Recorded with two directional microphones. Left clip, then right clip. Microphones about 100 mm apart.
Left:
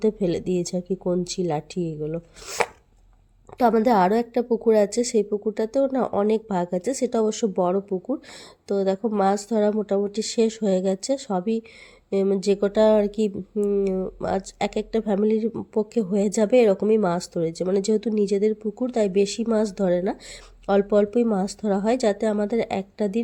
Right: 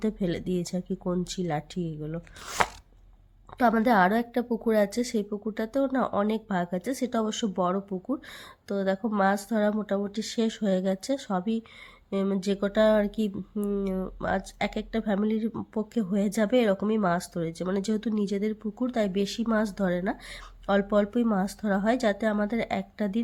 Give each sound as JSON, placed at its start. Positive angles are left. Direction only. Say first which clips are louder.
{"t": 0.0, "sound": "speech", "louder": "left 8 dB", "side_deg": 15}
{"t": 13.5, "sound": "speech", "louder": "left 9 dB", "side_deg": 5}
{"t": 14.2, "sound": "speech", "louder": "left 4 dB", "side_deg": 20}